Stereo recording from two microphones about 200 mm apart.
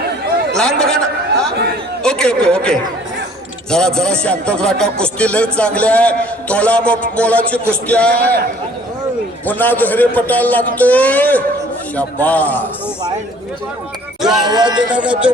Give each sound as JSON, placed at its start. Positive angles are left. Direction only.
{"t": 0.5, "sound": "a man's voice", "side_deg": 5}
{"t": 2.0, "sound": "a man's voice", "side_deg": 5}
{"t": 9.5, "sound": "a man's voice", "side_deg": 10}
{"t": 14.2, "sound": "a sound", "side_deg": 0}
{"t": 14.4, "sound": "speech", "side_deg": -20}
{"t": 14.9, "sound": "speech", "side_deg": -5}